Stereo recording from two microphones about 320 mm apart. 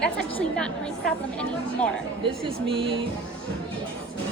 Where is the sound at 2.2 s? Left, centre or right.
Centre.